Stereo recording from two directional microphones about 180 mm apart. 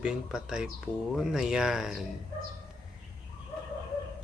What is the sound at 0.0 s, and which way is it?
Speech, 5° right (ahead or behind).